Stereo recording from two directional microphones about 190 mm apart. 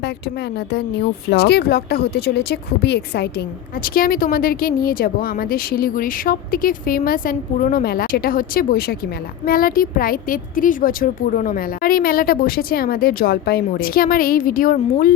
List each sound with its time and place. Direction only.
1.3 s speech: 60° left (ahead or behind)
3.8 s a woman's voice: 50° left (ahead or behind)